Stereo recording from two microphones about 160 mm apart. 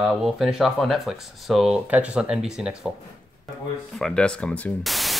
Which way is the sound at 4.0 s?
5° left (ahead or behind).